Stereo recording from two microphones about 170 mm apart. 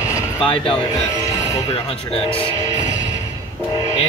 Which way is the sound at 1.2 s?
20° left (ahead or behind).